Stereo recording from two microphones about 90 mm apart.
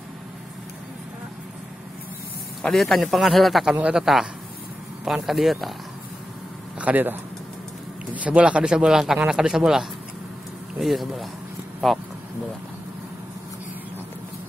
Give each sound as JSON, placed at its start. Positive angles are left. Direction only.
{"t": 2.6, "sound": "speech", "side_deg": 5}
{"t": 3.7, "sound": "speech", "side_deg": -10}
{"t": 6.8, "sound": "speech", "side_deg": -20}